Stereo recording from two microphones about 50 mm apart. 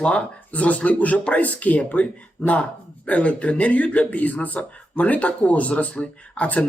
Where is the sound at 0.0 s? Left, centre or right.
Left.